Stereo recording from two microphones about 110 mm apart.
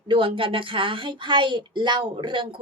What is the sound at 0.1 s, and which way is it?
A woman's voice, 50° right (ahead or behind).